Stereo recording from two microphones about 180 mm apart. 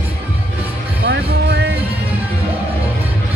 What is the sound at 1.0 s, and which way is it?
Music, 65° right (ahead or behind).